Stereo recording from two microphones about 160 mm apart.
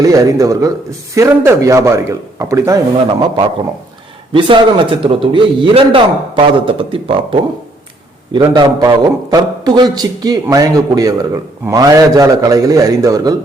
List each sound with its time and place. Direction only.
0.0 s a man's voice: 20° right (ahead or behind)